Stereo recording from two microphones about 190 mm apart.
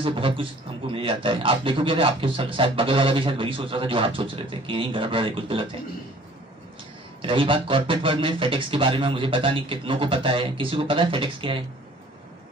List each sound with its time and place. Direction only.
0.0 s a man's voice: 25° right (ahead or behind)
7.2 s a man's voice: 30° right (ahead or behind)